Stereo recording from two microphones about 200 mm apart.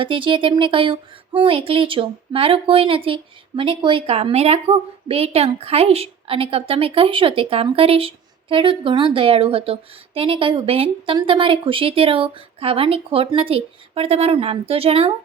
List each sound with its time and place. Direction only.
0.0 s speech: 25° right (ahead or behind)